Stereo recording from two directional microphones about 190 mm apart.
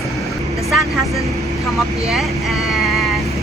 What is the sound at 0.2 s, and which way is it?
Vehicle, centre (ahead or behind).